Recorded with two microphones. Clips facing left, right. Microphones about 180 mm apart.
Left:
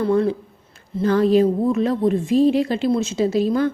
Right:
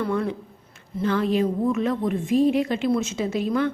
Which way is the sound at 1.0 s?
40° left (ahead or behind).